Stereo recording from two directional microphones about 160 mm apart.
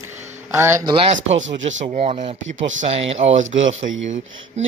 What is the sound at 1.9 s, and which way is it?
Speech, 40° right (ahead or behind).